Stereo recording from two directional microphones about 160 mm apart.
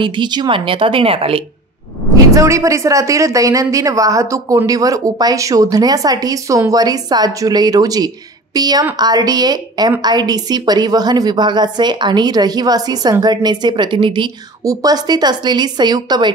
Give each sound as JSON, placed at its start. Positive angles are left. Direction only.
{"t": 0.0, "sound": "a woman's voice", "side_deg": -30}
{"t": 2.3, "sound": "a woman's voice", "side_deg": -20}